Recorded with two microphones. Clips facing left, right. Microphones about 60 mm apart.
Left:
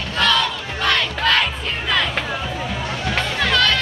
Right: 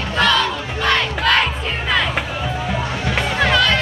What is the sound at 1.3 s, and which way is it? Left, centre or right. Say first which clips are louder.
Crowd: right 3 dB; centre.